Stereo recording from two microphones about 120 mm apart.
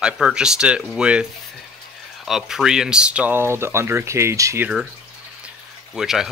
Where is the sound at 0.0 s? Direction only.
5° right (ahead or behind).